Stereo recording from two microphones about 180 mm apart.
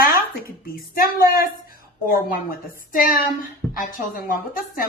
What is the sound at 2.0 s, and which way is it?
A woman's voice, 50° left (ahead or behind).